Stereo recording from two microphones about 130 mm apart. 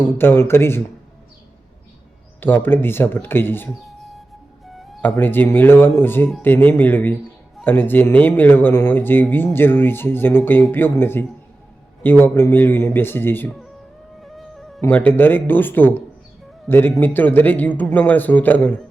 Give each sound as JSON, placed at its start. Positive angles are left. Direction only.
{"t": 0.1, "sound": "speech", "side_deg": 15}
{"t": 2.4, "sound": "speech", "side_deg": 15}
{"t": 3.8, "sound": "music", "side_deg": 0}
{"t": 5.1, "sound": "speech", "side_deg": 15}
{"t": 14.2, "sound": "music", "side_deg": 0}
{"t": 14.8, "sound": "speech", "side_deg": 15}